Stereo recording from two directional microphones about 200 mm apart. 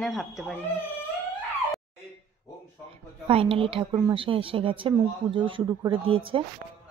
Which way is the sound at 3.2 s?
25° right (ahead or behind).